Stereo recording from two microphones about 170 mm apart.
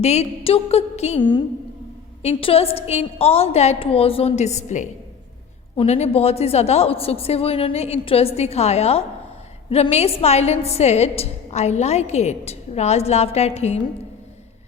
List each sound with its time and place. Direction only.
0.0 s a woman's voice: 40° left (ahead or behind)
2.2 s a woman's voice: 35° left (ahead or behind)